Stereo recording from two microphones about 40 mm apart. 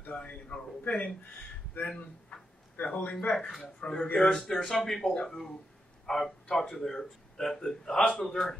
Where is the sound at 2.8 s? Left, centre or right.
Left.